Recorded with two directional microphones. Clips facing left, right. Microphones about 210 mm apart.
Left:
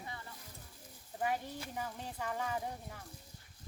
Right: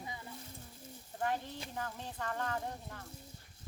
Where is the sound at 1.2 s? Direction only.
10° left (ahead or behind).